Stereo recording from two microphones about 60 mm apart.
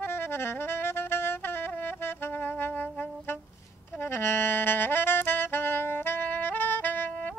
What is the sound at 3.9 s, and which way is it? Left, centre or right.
Saxophone, left.